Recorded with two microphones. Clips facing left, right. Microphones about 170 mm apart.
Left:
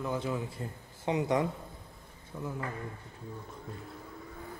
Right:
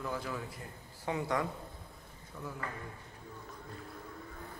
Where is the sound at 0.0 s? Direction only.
20° left (ahead or behind).